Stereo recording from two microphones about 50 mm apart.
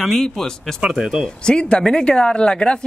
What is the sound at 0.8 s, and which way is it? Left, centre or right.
Speech, centre.